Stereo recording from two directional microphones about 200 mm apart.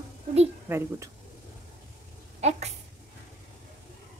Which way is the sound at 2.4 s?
35° right (ahead or behind).